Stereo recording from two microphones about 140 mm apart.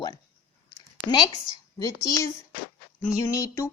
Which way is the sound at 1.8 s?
25° left (ahead or behind).